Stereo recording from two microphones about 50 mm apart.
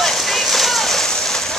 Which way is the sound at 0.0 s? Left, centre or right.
Centre.